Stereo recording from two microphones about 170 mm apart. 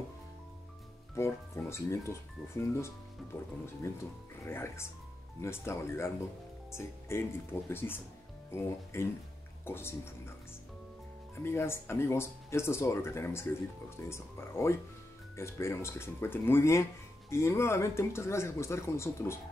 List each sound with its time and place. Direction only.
1.1 s speech: 15° left (ahead or behind)
4.5 s speech: 15° left (ahead or behind)
11.4 s speech: 15° left (ahead or behind)